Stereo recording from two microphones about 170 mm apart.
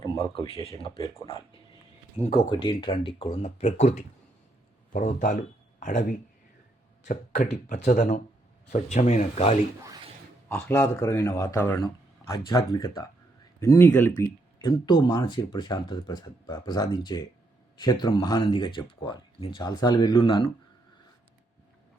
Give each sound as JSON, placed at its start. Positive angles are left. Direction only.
{"t": 0.2, "sound": "speech", "side_deg": 35}
{"t": 2.5, "sound": "speech", "side_deg": 25}
{"t": 10.5, "sound": "speech", "side_deg": 15}
{"t": 14.6, "sound": "speech", "side_deg": 25}